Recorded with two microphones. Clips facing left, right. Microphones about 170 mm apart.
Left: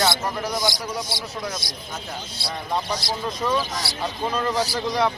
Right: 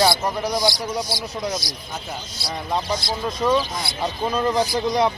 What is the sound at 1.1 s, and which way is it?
Speech, 25° left (ahead or behind).